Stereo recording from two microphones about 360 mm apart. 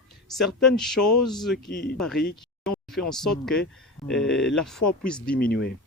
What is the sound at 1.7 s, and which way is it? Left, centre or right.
Speech, left.